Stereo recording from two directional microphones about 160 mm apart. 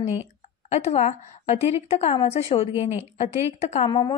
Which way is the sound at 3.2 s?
40° left (ahead or behind).